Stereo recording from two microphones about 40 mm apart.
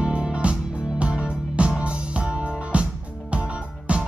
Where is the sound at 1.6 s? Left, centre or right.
Right.